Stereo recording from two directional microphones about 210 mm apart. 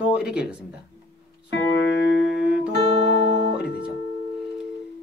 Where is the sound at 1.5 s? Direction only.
55° left (ahead or behind).